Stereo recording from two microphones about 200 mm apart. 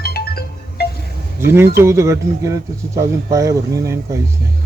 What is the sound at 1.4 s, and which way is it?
Speech, 10° right (ahead or behind).